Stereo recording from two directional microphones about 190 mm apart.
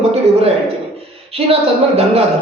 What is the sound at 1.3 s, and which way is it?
Speech, 30° right (ahead or behind).